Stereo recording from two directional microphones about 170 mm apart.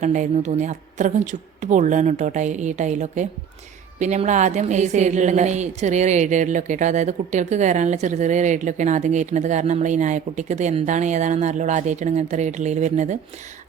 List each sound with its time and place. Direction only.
0.0 s a woman's voice: 45° right (ahead or behind)